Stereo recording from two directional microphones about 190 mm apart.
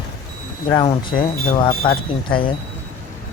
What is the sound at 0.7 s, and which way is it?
Speech, 25° left (ahead or behind).